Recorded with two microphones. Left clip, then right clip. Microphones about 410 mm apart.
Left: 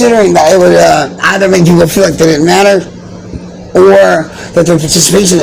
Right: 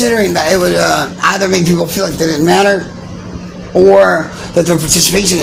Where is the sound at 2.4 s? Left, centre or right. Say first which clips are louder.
Left 1 dB; right.